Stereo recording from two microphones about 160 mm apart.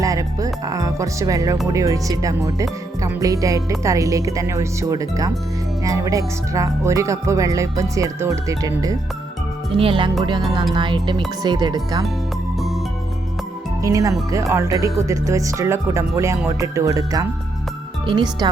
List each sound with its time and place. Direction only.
0.0 s speech: 20° right (ahead or behind)
9.7 s speech: 35° right (ahead or behind)
13.8 s speech: 20° right (ahead or behind)